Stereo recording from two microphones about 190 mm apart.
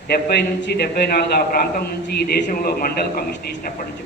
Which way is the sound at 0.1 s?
60° left (ahead or behind).